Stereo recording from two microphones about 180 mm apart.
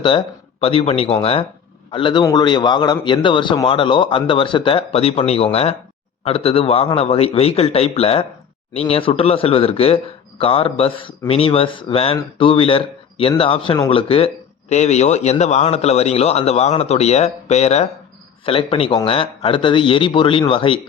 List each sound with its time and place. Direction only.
0.0 s a man's voice: 30° left (ahead or behind)